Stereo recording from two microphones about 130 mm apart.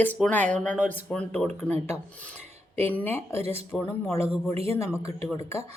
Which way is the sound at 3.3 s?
50° right (ahead or behind).